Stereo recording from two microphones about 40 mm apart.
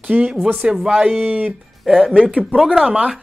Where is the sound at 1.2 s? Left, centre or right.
Right.